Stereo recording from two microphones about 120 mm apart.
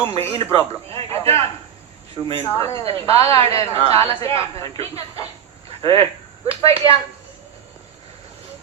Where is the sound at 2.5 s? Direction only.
25° left (ahead or behind).